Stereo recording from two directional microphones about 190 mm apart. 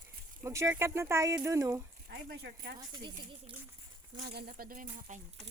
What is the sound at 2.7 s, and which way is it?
Speech, 20° right (ahead or behind).